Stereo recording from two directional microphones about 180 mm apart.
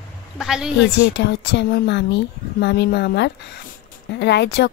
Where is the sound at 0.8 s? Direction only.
80° left.